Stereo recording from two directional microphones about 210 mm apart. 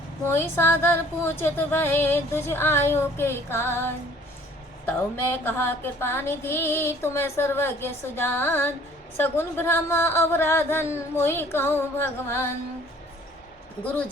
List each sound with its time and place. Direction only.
0.3 s female singing: 10° left (ahead or behind)
13.8 s female singing: 5° left (ahead or behind)